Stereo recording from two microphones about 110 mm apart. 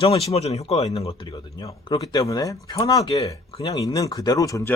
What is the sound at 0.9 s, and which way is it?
Speech, 65° left (ahead or behind).